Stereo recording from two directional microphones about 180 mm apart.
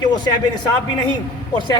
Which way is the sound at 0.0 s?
25° left (ahead or behind).